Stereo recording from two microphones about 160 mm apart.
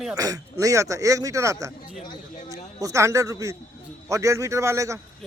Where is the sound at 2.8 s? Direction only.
20° right (ahead or behind).